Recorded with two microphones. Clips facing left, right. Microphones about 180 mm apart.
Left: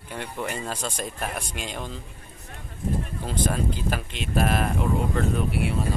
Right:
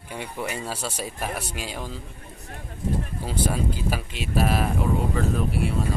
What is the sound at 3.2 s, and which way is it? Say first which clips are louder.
A man's voice: even; 10° right (ahead or behind).